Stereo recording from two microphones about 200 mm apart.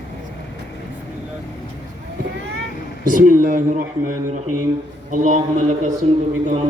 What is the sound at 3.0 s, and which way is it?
A man's voice, 45° right (ahead or behind).